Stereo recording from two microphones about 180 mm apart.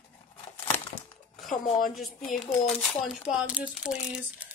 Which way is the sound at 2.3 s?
5° left (ahead or behind).